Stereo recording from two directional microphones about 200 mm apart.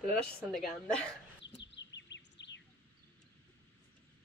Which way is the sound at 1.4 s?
60° left (ahead or behind).